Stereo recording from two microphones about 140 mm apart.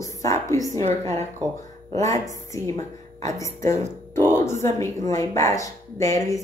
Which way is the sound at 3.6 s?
55° right (ahead or behind).